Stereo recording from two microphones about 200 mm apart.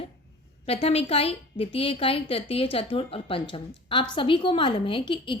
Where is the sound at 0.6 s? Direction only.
30° left (ahead or behind).